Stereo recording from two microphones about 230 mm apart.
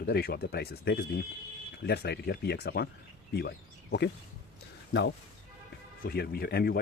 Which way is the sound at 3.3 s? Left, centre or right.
Left.